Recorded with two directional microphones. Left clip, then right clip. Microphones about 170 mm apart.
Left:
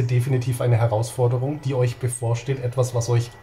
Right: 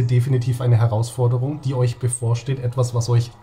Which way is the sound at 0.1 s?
15° right (ahead or behind).